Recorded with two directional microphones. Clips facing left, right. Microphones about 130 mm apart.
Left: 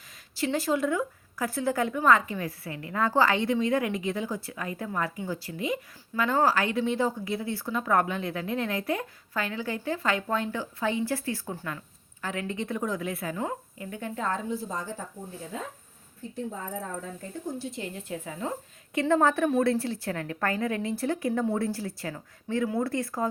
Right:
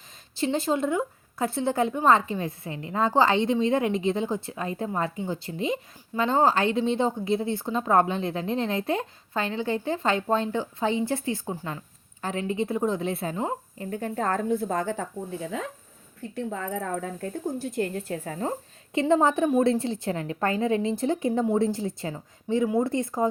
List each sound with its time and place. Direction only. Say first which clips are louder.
0.3 s a woman's voice: right 2 dB; 25° right (ahead or behind); by 15.0 s 65° right (ahead or behind)
16.3 s speech: right 4 dB; 70° right (ahead or behind); by 18.5 s 40° right (ahead or behind)
18.9 s a woman's voice: right 2 dB; 20° right (ahead or behind)